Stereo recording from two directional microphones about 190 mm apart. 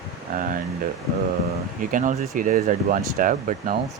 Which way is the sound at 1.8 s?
45° right (ahead or behind).